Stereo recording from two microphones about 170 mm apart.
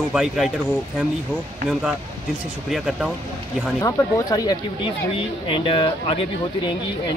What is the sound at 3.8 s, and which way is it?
Speech, 20° left (ahead or behind).